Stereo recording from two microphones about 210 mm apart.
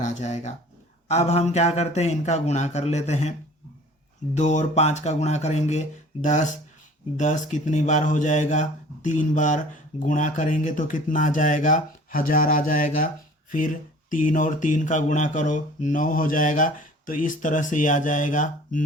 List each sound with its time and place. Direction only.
0.0 s speech: 35° left (ahead or behind)
4.4 s speech: 35° left (ahead or behind)